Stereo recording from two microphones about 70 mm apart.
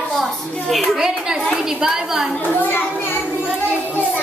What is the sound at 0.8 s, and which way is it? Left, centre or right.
A woman's voice, centre.